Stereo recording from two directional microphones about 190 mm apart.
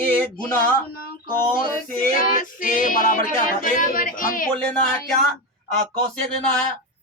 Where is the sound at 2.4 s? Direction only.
45° left (ahead or behind).